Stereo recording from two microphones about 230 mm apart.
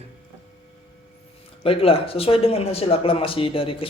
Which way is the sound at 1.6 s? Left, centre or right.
Left.